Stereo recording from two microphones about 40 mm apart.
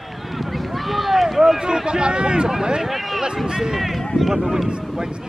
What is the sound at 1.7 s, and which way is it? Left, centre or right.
Speech, right.